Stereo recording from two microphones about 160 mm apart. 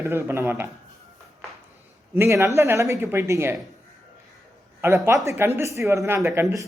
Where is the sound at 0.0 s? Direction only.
15° right (ahead or behind).